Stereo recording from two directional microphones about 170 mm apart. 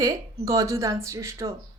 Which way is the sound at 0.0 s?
20° right (ahead or behind).